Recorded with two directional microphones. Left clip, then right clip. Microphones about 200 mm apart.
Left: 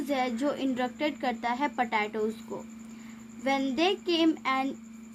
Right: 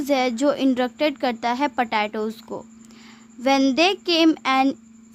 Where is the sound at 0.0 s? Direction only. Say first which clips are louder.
Right 9 dB; 40° right (ahead or behind).